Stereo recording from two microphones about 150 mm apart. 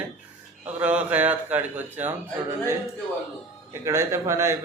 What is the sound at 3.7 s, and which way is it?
Speech, 20° right (ahead or behind).